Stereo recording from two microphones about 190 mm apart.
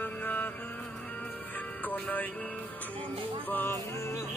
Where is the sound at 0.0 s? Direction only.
10° left (ahead or behind).